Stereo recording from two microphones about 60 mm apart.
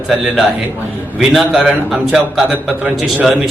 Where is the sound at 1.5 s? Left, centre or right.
Centre.